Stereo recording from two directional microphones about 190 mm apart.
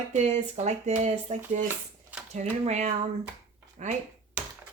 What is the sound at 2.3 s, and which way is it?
A woman's voice, 35° right (ahead or behind).